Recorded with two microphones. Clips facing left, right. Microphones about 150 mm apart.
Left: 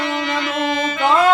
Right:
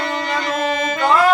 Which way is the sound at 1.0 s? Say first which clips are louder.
Even; 20° left (ahead or behind).